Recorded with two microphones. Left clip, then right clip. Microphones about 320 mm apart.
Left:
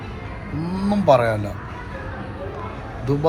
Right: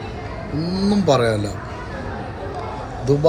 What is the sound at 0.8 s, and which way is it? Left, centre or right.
Speech, centre.